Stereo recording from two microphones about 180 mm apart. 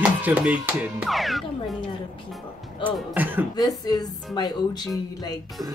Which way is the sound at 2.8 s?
10° right (ahead or behind).